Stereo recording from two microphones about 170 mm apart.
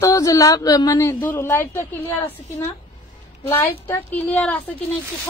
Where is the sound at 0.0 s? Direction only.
20° left (ahead or behind).